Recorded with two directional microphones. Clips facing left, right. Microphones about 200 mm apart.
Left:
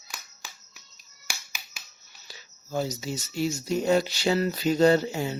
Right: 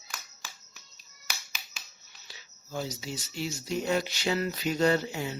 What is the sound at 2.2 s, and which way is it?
Speech, 45° left (ahead or behind).